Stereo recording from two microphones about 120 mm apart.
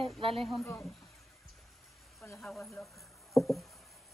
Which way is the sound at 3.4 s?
Centre (ahead or behind).